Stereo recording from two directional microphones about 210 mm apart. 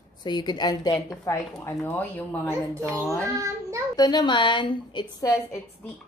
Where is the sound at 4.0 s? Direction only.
20° left (ahead or behind).